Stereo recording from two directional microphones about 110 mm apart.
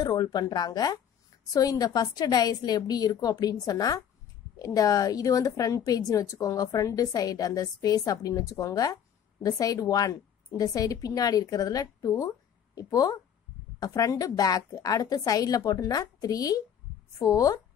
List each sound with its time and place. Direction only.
0.0 s a woman's voice: 35° left (ahead or behind)